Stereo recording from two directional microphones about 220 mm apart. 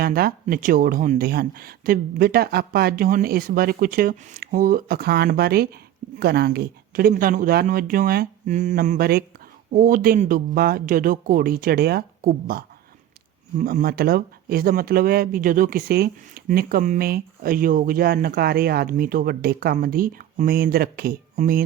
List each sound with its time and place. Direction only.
0.0 s speech: 40° right (ahead or behind)